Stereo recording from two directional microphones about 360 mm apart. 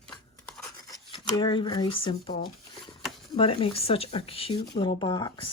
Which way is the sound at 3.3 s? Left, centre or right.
Centre.